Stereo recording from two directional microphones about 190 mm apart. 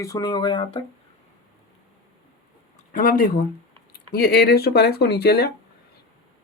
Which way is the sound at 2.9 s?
50° left (ahead or behind).